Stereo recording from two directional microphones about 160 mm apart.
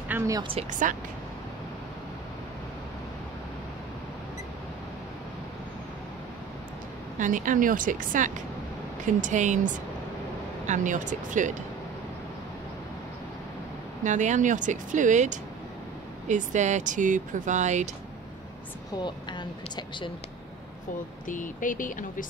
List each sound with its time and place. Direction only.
0.4 s speech: 35° right (ahead or behind)
0.7 s speech: 55° right (ahead or behind)
7.2 s speech: 55° right (ahead or behind)
10.7 s speech: 50° right (ahead or behind)
14.0 s speech: 50° right (ahead or behind)
19.0 s speech: 30° left (ahead or behind)
21.3 s speech: 55° left (ahead or behind)